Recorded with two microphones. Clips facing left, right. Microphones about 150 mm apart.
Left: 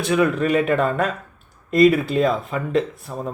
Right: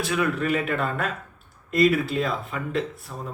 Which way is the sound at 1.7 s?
20° left (ahead or behind).